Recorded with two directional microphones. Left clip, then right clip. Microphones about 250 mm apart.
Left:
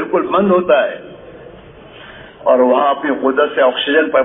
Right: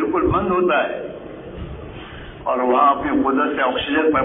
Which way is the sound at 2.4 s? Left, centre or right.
Left.